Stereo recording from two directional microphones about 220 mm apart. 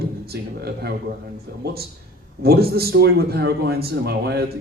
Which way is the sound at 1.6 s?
45° right (ahead or behind).